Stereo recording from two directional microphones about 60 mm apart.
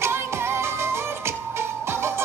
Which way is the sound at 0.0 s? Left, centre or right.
Right.